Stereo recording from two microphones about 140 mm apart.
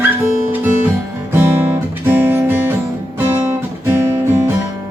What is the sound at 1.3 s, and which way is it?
Guitar, 20° right (ahead or behind).